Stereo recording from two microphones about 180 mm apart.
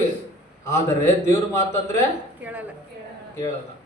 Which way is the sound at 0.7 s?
15° left (ahead or behind).